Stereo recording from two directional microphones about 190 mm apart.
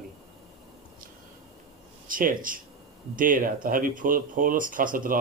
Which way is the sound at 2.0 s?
45° right (ahead or behind).